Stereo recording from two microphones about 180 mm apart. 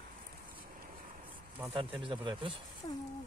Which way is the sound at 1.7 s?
30° right (ahead or behind).